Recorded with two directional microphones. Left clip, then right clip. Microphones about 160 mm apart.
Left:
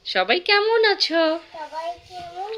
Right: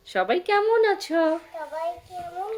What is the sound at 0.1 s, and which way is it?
A woman's voice, 15° right (ahead or behind).